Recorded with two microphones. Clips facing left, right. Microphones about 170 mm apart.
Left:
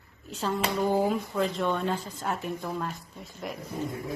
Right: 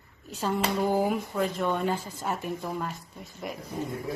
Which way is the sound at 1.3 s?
Centre (ahead or behind).